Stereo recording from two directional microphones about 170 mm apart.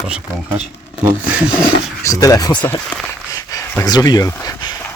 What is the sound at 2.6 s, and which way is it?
Speech, 5° left (ahead or behind).